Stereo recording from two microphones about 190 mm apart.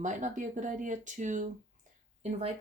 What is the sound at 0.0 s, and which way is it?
A woman's voice, 40° right (ahead or behind).